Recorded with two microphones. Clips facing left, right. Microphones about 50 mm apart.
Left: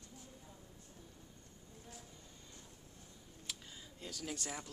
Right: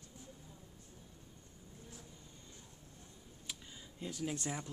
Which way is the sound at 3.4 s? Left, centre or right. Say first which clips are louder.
Even; centre.